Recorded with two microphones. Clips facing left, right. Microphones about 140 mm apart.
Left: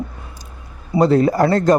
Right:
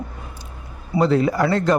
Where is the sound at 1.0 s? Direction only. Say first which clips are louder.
Left 4 dB; 40° left (ahead or behind).